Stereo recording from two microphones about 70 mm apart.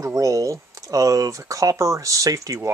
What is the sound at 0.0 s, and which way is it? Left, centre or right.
Speech, right.